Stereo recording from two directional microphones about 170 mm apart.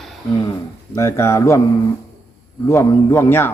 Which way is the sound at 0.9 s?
15° left (ahead or behind).